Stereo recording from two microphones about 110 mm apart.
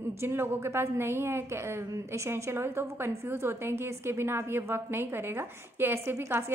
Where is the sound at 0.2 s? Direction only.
20° right (ahead or behind).